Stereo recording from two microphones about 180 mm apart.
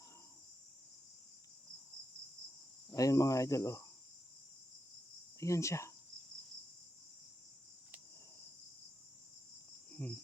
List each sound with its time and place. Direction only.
2.9 s speech: 20° left (ahead or behind)
5.4 s speech: 15° left (ahead or behind)
9.9 s cricket: 5° left (ahead or behind)